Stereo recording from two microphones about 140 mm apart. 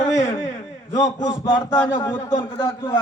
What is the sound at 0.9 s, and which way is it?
A man's voice, 25° left (ahead or behind).